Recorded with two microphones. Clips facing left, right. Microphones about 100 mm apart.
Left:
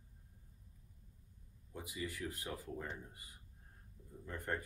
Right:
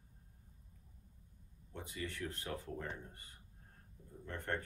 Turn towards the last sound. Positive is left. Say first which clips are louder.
# right 1 dB
turn(degrees=10)  # may be behind; listen again after turning